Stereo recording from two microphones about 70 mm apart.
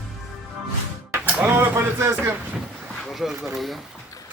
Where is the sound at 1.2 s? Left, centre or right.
Right.